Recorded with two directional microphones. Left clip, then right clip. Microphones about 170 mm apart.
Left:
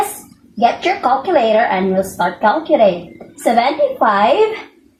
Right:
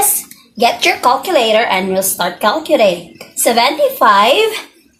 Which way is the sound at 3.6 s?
35° right (ahead or behind).